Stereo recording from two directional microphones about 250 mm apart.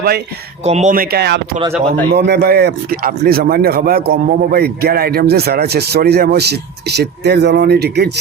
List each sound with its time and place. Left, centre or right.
0.6 s speech: right